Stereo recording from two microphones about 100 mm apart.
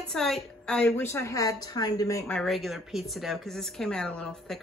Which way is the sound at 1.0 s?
30° left (ahead or behind).